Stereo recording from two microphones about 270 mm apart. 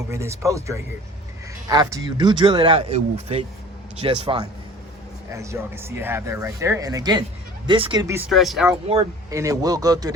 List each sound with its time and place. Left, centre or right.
0.1 s speech: centre
8.9 s speech: centre